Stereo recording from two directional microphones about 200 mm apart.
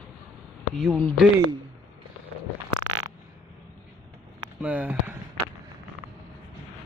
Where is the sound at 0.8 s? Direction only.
Centre (ahead or behind).